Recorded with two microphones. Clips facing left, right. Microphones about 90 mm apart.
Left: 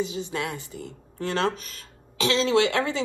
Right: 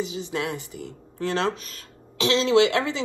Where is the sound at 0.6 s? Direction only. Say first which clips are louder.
Right 1 dB; 35° left (ahead or behind).